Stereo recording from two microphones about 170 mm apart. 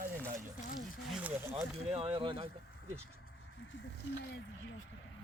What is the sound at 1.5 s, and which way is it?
Speech, 35° right (ahead or behind).